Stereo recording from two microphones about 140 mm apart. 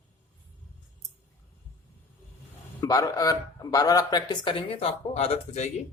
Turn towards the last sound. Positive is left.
turn(degrees=50)  # may be behind; listen again after turning